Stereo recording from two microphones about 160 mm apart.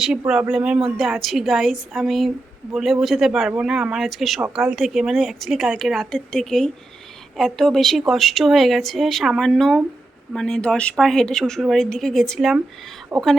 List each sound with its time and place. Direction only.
0.3 s speech: 5° right (ahead or behind)
13.1 s speech: 15° right (ahead or behind)